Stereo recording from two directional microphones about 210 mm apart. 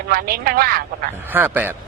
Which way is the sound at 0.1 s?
45° right (ahead or behind).